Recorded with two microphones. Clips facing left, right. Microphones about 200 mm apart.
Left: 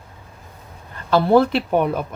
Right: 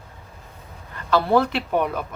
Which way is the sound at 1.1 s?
30° left (ahead or behind).